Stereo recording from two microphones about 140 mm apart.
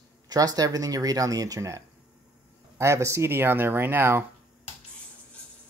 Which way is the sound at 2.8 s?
20° right (ahead or behind).